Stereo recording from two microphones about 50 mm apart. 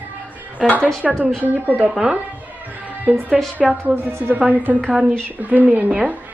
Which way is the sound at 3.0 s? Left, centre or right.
Right.